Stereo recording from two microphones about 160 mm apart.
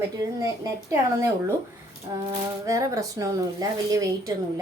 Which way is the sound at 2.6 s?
20° right (ahead or behind).